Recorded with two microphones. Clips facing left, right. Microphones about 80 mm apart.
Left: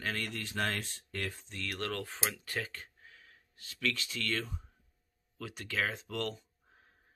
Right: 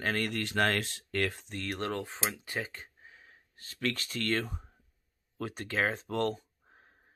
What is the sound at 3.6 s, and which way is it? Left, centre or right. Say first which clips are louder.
Speech: right 2 dB; right.